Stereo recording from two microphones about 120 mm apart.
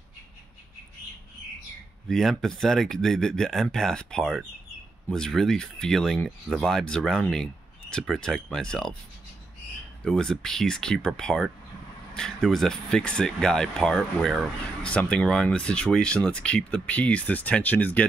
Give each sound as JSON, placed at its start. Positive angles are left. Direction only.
{"t": 2.0, "sound": "speech", "side_deg": 5}
{"t": 10.0, "sound": "speech", "side_deg": 5}